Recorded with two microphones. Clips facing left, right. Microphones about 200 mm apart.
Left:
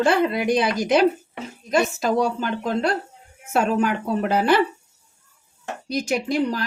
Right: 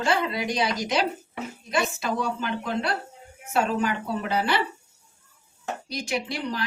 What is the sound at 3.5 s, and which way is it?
A woman's voice, 55° left (ahead or behind).